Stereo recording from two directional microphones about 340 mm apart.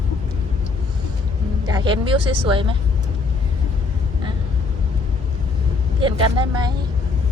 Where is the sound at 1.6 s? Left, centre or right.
Centre.